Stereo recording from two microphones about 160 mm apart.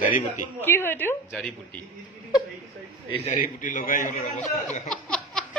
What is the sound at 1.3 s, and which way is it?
Speech, 5° left (ahead or behind).